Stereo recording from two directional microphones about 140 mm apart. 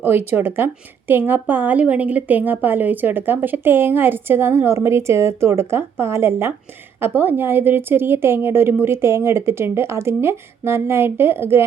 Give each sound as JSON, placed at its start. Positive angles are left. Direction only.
{"t": 0.0, "sound": "a woman's voice", "side_deg": -15}